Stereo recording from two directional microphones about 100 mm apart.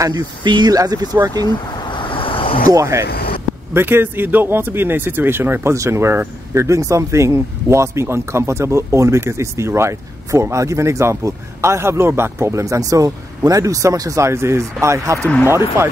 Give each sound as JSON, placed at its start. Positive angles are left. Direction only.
{"t": 0.0, "sound": "speech", "side_deg": -45}
{"t": 1.9, "sound": "vehicle", "side_deg": 55}
{"t": 2.7, "sound": "speech", "side_deg": -30}
{"t": 15.1, "sound": "speech", "side_deg": 10}